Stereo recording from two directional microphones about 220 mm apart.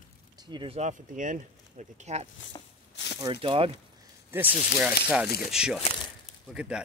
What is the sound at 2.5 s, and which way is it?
Walk, 20° left (ahead or behind).